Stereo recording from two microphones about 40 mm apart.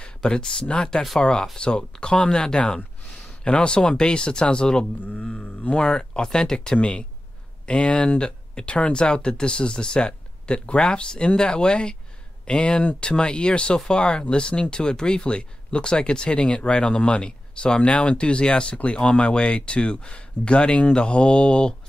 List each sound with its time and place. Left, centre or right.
0.0 s speech: centre
5.0 s speech: left
5.8 s speech: centre